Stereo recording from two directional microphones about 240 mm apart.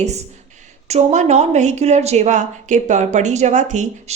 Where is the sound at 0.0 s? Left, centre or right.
Right.